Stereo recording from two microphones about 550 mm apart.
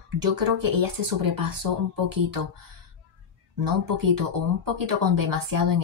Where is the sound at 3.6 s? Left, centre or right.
Right.